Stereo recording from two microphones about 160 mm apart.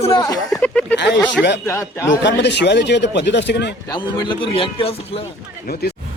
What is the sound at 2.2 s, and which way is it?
Speech, 90° left.